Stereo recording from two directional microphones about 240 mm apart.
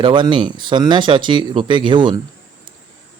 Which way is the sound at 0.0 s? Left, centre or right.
Centre.